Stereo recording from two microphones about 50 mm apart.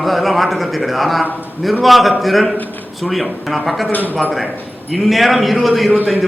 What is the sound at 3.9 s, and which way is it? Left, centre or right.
Speech, left.